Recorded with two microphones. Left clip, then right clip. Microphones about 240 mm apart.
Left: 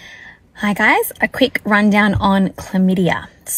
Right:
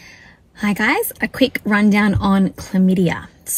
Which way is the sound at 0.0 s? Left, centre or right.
Right.